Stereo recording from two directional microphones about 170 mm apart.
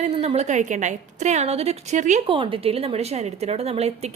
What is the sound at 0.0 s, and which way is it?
A woman's voice, 40° right (ahead or behind).